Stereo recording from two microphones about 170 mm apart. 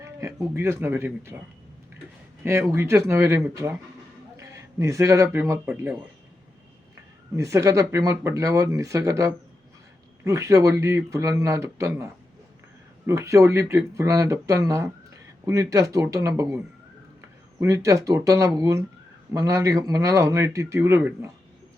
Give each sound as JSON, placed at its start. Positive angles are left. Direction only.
{"t": 0.0, "sound": "speech", "side_deg": -20}
{"t": 2.4, "sound": "a man's voice", "side_deg": -15}
{"t": 7.3, "sound": "a man's voice", "side_deg": -20}